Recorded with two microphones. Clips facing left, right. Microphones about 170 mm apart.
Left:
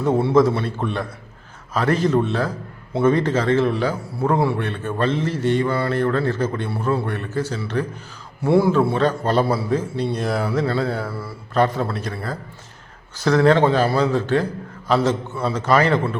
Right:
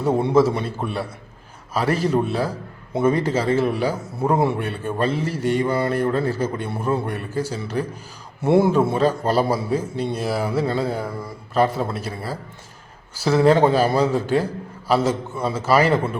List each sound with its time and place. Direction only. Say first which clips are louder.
0.3 s a man's voice: left 1 dB; 5° right (ahead or behind)
8.4 s a man's voice: even; 20° right (ahead or behind)
9.0 s a man's voice: even; 10° right (ahead or behind)
11.5 s a man's voice: even; 5° right (ahead or behind)
13.1 s a man's voice: even; 5° right (ahead or behind)